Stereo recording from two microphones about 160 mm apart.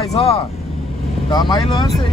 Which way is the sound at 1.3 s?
25° left (ahead or behind).